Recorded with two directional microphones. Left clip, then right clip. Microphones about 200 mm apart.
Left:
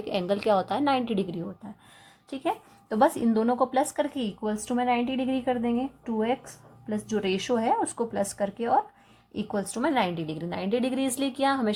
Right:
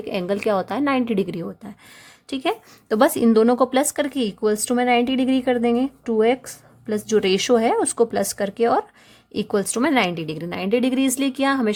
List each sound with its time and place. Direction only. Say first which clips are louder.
0.0 s a woman's voice: right 4 dB; 35° right (ahead or behind)
2.3 s speech: right 6 dB; 60° right (ahead or behind)
9.4 s a woman's voice: right 8 dB; 60° right (ahead or behind); by 11.7 s 45° right (ahead or behind)